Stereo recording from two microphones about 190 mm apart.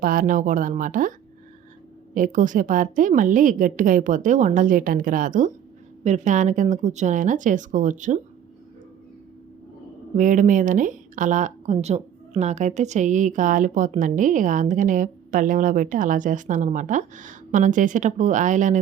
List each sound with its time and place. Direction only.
0.0 s speech: 45° right (ahead or behind)
2.1 s a woman's voice: 45° right (ahead or behind)
10.2 s speech: 45° right (ahead or behind)